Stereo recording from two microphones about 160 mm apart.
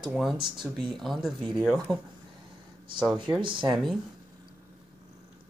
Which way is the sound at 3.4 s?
30° right (ahead or behind).